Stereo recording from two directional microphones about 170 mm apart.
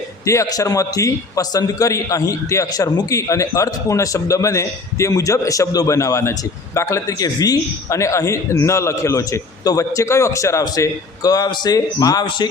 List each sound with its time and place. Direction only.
0.3 s a man's voice: 20° left (ahead or behind)